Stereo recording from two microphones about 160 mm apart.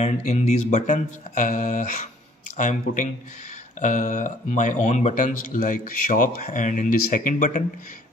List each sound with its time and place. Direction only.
0.0 s speech: 45° left (ahead or behind)